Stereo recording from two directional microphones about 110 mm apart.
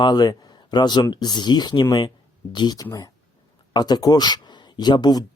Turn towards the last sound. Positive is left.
turn(degrees=40)  # may be behind; listen again after turning